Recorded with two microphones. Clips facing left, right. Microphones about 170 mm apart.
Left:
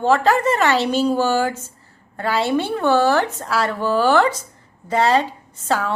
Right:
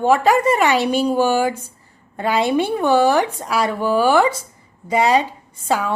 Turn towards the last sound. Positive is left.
turn(degrees=-10)  # may be behind; listen again after turning